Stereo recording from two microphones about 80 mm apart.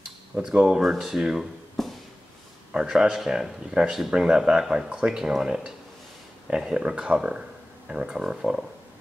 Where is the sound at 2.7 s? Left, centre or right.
Centre.